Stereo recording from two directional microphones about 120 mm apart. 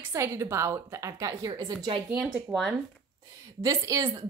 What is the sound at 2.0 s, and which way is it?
Speech, 5° right (ahead or behind).